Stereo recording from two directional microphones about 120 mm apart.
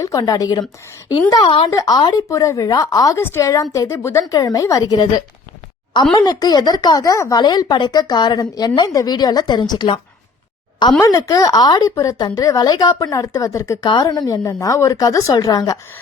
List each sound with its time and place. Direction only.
0.0 s speech: 30° left (ahead or behind)
1.7 s speech: 30° left (ahead or behind)
11.0 s speech: 30° left (ahead or behind)
13.8 s speech: 35° left (ahead or behind)